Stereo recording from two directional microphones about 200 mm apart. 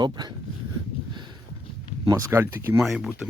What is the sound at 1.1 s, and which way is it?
Clip-clop, 20° right (ahead or behind).